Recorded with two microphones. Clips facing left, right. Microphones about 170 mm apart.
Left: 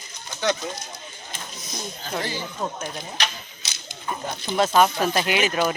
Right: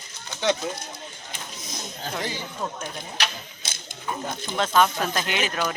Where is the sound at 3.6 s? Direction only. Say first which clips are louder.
Right 4 dB; 50° right (ahead or behind).